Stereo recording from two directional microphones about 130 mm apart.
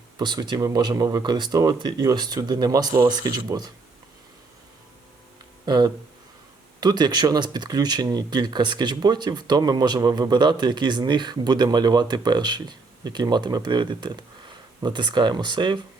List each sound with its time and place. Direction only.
0.2 s speech: 35° right (ahead or behind)
5.6 s speech: 30° right (ahead or behind)